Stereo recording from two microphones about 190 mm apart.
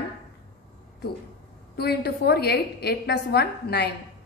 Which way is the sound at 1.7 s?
55° left (ahead or behind).